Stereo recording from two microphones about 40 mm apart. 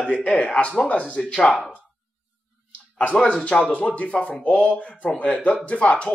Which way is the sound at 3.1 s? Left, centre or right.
Left.